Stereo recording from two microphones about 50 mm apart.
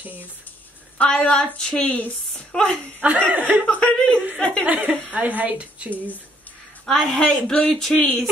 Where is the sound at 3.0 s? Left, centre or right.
Right.